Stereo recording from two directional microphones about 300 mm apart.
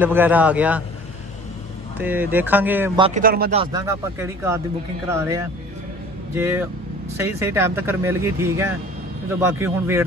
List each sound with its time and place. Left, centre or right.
0.0 s speech: centre
2.0 s speech: centre
3.0 s speech: right
3.5 s speech: centre